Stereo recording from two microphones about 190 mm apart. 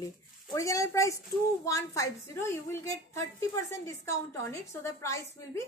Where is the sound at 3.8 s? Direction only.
15° left (ahead or behind).